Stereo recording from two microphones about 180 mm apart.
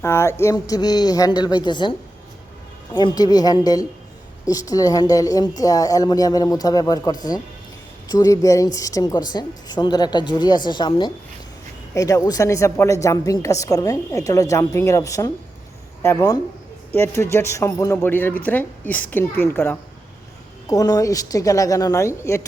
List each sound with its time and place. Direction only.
0.0 s a woman's voice: 15° left (ahead or behind)